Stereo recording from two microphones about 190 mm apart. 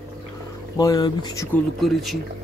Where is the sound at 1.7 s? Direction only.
Centre (ahead or behind).